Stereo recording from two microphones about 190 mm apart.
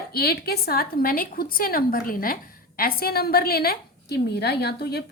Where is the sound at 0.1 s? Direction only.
55° left (ahead or behind).